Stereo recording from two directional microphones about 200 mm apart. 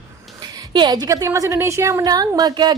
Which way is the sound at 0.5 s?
20° right (ahead or behind).